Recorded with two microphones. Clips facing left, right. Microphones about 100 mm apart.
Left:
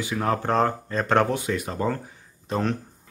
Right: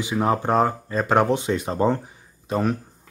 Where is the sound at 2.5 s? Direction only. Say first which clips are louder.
Right 3 dB; 5° right (ahead or behind).